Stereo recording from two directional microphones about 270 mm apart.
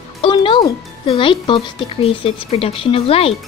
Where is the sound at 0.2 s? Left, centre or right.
Centre.